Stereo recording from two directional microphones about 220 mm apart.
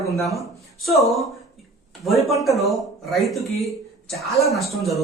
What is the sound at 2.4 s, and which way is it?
A man's voice, centre (ahead or behind).